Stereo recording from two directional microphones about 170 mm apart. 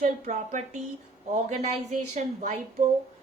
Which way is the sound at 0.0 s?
45° right (ahead or behind).